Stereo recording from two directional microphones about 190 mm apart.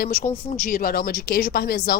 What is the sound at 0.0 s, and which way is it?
Speech, 50° left (ahead or behind).